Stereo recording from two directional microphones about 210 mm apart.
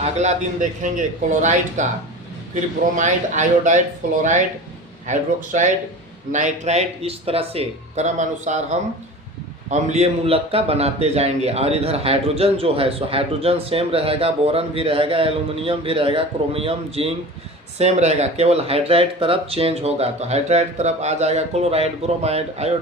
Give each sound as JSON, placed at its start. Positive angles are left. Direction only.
{"t": 0.0, "sound": "speech", "side_deg": -30}
{"t": 5.0, "sound": "speech", "side_deg": -35}